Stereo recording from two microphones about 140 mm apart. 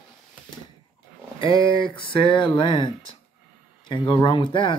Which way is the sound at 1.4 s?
35° left (ahead or behind).